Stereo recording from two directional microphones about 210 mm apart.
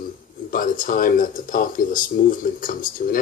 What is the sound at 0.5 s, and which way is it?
Speech, 40° left (ahead or behind).